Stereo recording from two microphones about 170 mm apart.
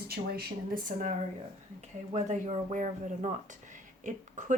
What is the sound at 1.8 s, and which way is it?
Speech, 40° right (ahead or behind).